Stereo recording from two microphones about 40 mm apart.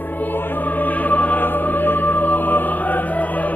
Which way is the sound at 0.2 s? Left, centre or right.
Left.